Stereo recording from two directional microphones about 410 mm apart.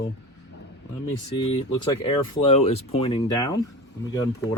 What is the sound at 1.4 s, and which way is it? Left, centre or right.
Speech, centre.